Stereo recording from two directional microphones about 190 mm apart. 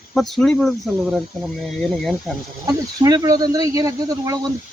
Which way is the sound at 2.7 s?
20° right (ahead or behind).